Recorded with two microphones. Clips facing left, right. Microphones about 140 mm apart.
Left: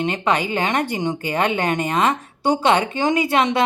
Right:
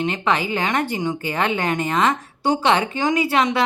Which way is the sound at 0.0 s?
20° left (ahead or behind).